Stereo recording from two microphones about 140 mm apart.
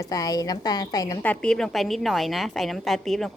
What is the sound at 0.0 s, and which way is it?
Speech, 25° left (ahead or behind).